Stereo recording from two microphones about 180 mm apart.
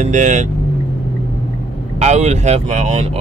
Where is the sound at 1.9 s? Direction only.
40° right (ahead or behind).